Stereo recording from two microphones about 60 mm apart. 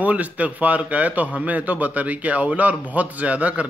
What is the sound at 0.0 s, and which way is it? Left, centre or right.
A man's voice, right.